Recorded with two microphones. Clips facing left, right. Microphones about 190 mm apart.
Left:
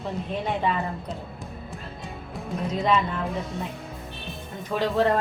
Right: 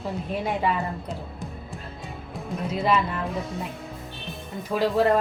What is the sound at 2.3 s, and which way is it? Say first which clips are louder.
A woman's voice: even; centre (ahead or behind).